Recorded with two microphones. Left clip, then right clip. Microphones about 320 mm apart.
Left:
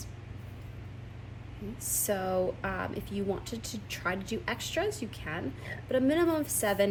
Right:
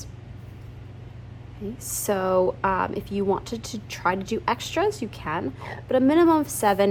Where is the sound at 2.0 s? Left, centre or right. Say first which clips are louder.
Right 9 dB; centre.